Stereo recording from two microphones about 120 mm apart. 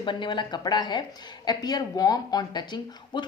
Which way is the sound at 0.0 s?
40° left (ahead or behind).